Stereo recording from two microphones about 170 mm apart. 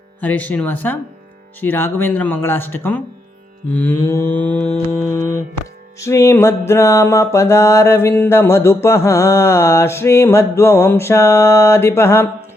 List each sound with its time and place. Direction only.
0.2 s music: 10° left (ahead or behind)